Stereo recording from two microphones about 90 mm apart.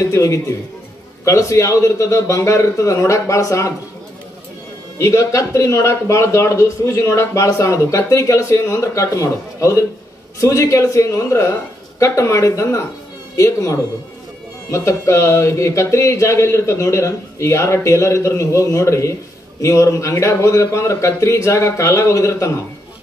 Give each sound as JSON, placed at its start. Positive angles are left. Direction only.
{"t": 0.0, "sound": "a man's voice", "side_deg": 35}
{"t": 4.9, "sound": "a man's voice", "side_deg": 35}